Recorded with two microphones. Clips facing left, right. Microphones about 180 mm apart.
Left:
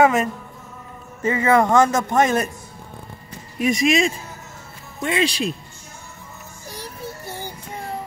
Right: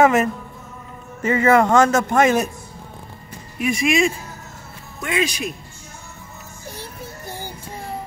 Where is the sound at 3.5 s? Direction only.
40° left (ahead or behind).